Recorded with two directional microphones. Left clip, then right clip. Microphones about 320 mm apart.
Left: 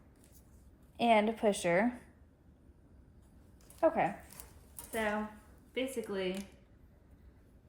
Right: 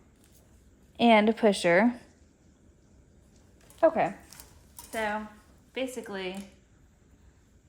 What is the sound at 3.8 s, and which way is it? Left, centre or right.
Speech, right.